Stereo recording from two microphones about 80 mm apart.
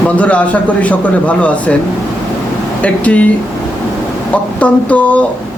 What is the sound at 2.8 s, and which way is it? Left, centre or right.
Speech, centre.